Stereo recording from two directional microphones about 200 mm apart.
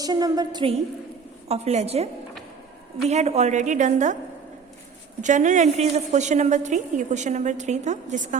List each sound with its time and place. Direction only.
0.0 s a woman's voice: 20° right (ahead or behind)
3.1 s a woman's voice: 35° right (ahead or behind)
5.2 s a woman's voice: 40° right (ahead or behind)